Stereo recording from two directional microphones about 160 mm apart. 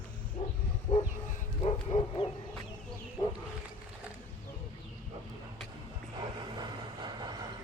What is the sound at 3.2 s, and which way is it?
Wild animals, 20° left (ahead or behind).